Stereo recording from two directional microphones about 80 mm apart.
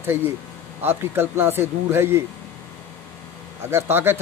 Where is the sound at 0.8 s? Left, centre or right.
Right.